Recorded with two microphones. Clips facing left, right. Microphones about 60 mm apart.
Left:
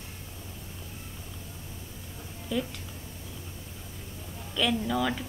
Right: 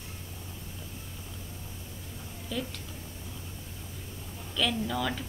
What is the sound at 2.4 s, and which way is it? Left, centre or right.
Speech, centre.